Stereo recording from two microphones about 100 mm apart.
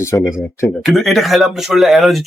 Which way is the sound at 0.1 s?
30° left (ahead or behind).